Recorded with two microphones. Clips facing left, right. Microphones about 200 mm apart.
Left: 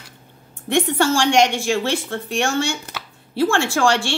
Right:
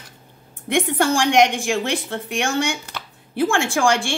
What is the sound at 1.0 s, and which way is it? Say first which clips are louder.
A woman's voice: right 2 dB; 15° right (ahead or behind).